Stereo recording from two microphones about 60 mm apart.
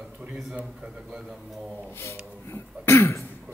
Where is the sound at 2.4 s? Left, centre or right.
Left.